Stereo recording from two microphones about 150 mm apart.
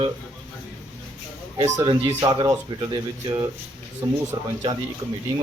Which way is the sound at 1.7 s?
25° right (ahead or behind).